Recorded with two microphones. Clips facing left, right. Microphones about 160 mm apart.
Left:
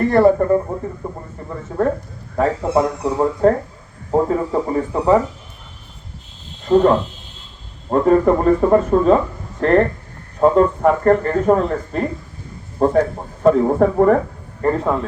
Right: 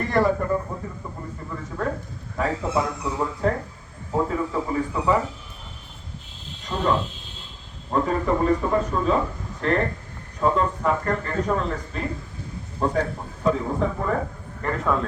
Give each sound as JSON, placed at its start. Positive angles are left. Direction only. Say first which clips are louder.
{"t": 0.1, "sound": "speech", "louder": "left 7 dB", "side_deg": 45}
{"t": 1.5, "sound": "a sound", "louder": "left 9 dB", "side_deg": 45}
{"t": 2.3, "sound": "speech", "louder": "left 7 dB", "side_deg": 45}
{"t": 6.7, "sound": "speech", "louder": "left 15 dB", "side_deg": 55}
{"t": 7.9, "sound": "speech", "louder": "left 9 dB", "side_deg": 50}
{"t": 14.6, "sound": "speech", "louder": "left 7 dB", "side_deg": 30}